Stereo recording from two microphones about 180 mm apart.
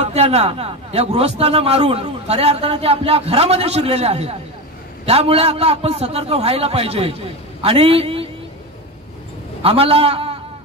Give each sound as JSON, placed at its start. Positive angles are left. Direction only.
{"t": 0.0, "sound": "a man's voice", "side_deg": -35}
{"t": 9.6, "sound": "a man's voice", "side_deg": -35}